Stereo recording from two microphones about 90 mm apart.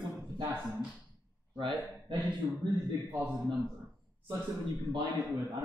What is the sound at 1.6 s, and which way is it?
Speech, 60° right (ahead or behind).